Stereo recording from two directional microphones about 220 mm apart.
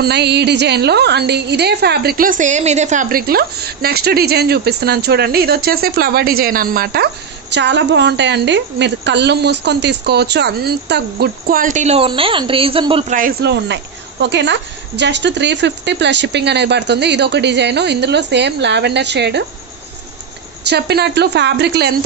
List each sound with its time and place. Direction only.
0.0 s a woman's voice: 50° right (ahead or behind); by 13.0 s 25° right (ahead or behind)
13.1 s a woman's voice: 45° right (ahead or behind)
20.6 s a woman's voice: 50° right (ahead or behind)